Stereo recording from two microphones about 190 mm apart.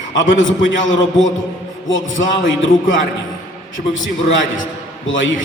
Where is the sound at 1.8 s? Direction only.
85° left.